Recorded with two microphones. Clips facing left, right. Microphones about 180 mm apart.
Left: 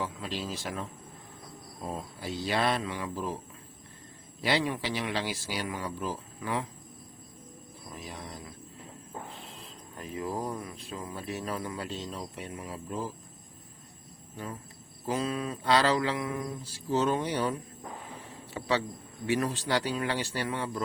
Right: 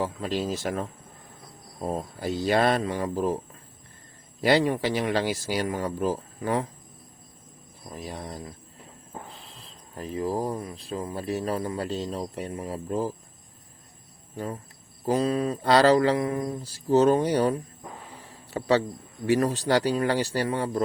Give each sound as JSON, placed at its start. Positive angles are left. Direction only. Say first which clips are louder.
{"t": 0.0, "sound": "speech", "louder": "right 7 dB", "side_deg": -45}
{"t": 4.4, "sound": "speech", "louder": "right 7 dB", "side_deg": -45}
{"t": 7.9, "sound": "speech", "louder": "right 6 dB", "side_deg": -35}
{"t": 9.9, "sound": "speech", "louder": "right 6 dB", "side_deg": -30}
{"t": 14.3, "sound": "speech", "louder": "right 6 dB", "side_deg": -40}